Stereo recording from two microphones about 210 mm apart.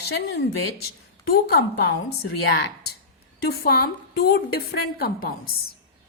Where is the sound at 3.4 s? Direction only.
50° left (ahead or behind).